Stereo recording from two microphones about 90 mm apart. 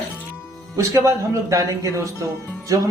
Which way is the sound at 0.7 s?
35° right (ahead or behind).